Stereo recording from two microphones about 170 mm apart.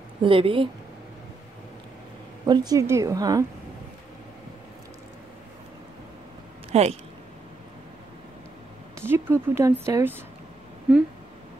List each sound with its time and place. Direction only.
0.2 s speech: 30° right (ahead or behind)
2.4 s a woman's voice: 25° right (ahead or behind)
6.7 s speech: 40° right (ahead or behind)
8.9 s speech: 15° right (ahead or behind)